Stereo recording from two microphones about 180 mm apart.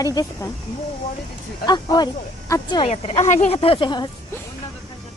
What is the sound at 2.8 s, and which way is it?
Speech, 30° left (ahead or behind).